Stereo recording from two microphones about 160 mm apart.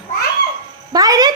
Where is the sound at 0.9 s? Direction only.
25° right (ahead or behind).